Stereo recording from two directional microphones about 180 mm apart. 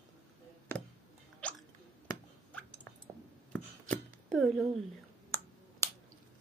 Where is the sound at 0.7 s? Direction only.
15° left (ahead or behind).